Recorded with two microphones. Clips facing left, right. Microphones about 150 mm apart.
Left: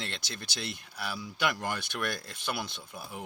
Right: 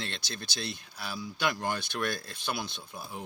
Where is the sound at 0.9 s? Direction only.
60° left (ahead or behind).